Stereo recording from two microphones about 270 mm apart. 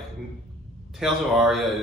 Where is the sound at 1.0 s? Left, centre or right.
Centre.